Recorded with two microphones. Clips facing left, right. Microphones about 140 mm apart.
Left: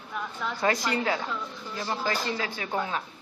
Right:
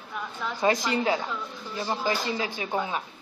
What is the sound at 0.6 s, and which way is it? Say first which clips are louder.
Speech: right 2 dB; 20° right (ahead or behind).